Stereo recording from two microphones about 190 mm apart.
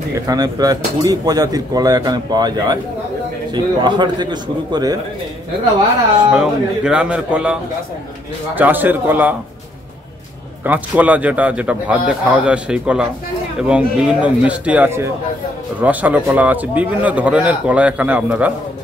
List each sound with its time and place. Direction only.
0.1 s speech: 20° right (ahead or behind)
6.3 s speech: 5° right (ahead or behind)
8.5 s a man's voice: 10° right (ahead or behind)
10.6 s a man's voice: 10° right (ahead or behind)